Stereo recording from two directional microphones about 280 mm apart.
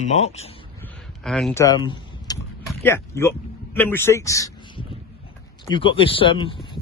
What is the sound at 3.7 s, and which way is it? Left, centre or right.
A man's voice, centre.